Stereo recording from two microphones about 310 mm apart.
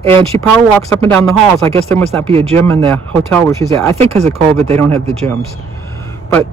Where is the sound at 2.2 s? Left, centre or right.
Centre.